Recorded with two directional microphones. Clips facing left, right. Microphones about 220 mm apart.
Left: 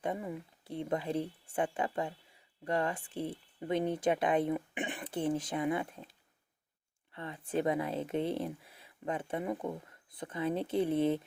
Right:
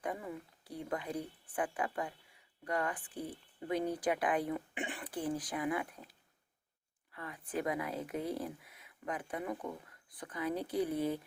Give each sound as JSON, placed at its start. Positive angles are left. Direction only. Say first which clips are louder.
{"t": 0.0, "sound": "speech", "louder": "left 4 dB", "side_deg": 20}